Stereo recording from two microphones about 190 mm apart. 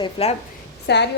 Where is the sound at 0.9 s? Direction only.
65° left (ahead or behind).